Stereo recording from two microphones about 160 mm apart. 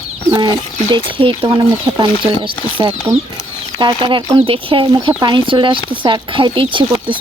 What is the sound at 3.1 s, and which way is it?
Speech, 40° right (ahead or behind).